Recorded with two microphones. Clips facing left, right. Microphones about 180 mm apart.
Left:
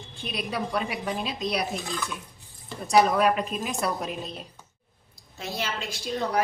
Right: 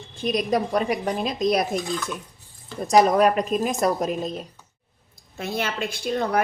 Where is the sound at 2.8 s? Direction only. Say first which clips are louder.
Right 4 dB; 45° right (ahead or behind).